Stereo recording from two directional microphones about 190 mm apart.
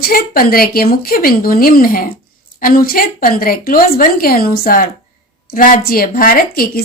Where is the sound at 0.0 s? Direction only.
50° left (ahead or behind).